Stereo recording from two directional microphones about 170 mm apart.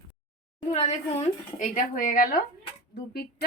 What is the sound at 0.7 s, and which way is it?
Speech, 40° left (ahead or behind).